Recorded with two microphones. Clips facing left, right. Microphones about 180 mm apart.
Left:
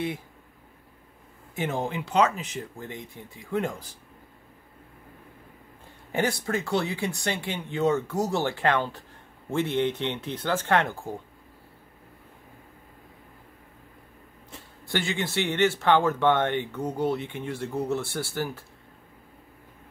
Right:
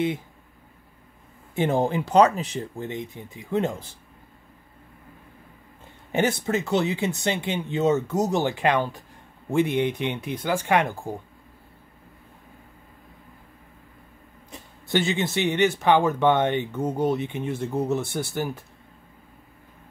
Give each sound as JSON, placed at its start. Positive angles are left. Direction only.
{"t": 1.5, "sound": "speech", "side_deg": -30}
{"t": 6.1, "sound": "speech", "side_deg": -20}
{"t": 14.5, "sound": "speech", "side_deg": -20}